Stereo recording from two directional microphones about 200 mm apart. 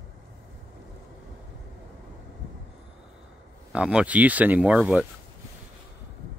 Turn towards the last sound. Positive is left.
turn(degrees=-5)  # may be behind; listen again after turning